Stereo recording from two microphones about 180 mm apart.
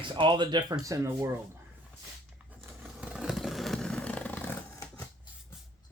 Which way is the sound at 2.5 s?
5° right (ahead or behind).